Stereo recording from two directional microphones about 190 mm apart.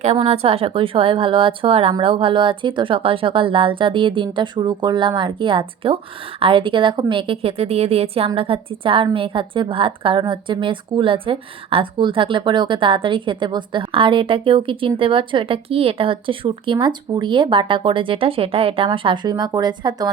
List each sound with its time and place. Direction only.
0.0 s a woman's voice: 35° right (ahead or behind)